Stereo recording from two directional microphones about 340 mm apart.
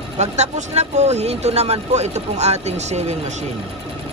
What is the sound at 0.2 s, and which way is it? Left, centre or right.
A man's voice, centre.